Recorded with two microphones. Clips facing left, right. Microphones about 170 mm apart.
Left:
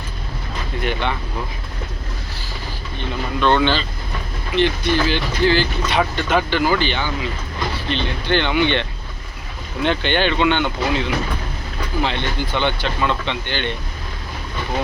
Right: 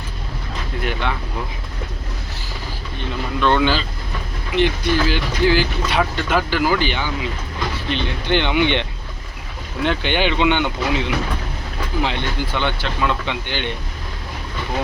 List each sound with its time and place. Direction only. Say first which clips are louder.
0.8 s speech: left 1 dB; centre (ahead or behind)
3.4 s speech: left 1 dB; 5° right (ahead or behind)
9.8 s speech: left 1 dB; 5° right (ahead or behind)